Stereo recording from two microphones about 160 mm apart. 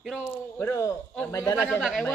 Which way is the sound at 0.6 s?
20° left (ahead or behind).